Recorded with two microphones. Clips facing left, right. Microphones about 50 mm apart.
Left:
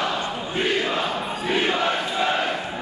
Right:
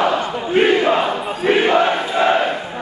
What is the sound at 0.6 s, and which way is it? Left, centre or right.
Battle cry, right.